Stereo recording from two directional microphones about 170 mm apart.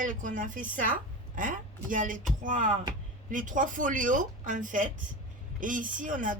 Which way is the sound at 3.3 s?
50° right (ahead or behind).